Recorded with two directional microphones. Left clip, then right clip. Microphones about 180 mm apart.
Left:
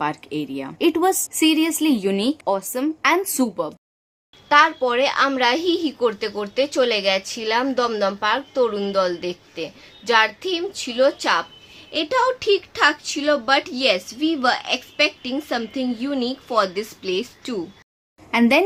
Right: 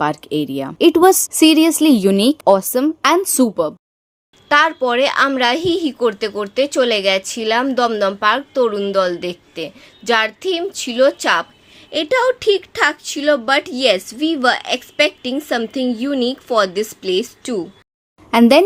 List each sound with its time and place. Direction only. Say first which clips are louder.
0.0 s a woman's voice: right 6 dB; 30° right (ahead or behind)